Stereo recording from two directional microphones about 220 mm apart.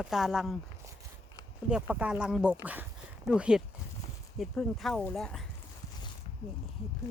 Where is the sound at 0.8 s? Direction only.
15° right (ahead or behind).